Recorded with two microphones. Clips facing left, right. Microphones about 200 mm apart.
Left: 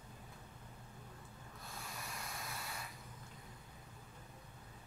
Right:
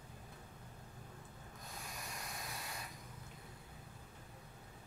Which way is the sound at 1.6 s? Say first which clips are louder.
Left 1 dB; 15° right (ahead or behind).